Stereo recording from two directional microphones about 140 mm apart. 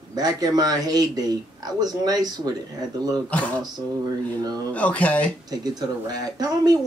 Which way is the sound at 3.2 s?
10° left (ahead or behind).